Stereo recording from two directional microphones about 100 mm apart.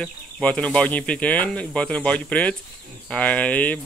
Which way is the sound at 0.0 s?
10° left (ahead or behind).